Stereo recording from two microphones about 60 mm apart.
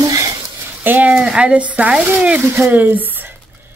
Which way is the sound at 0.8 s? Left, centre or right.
Right.